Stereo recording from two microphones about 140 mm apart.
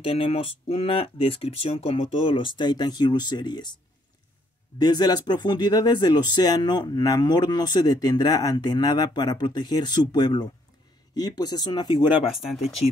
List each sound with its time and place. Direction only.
0.0 s speech: 45° left (ahead or behind)
4.7 s speech: 30° left (ahead or behind)
12.3 s speech: centre (ahead or behind)